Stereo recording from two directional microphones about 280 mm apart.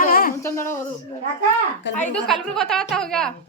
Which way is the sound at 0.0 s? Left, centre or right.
Left.